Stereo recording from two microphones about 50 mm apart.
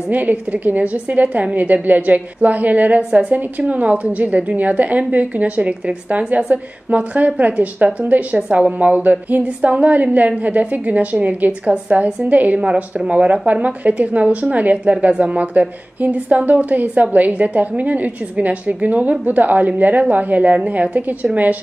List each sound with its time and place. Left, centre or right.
0.1 s a woman's voice: right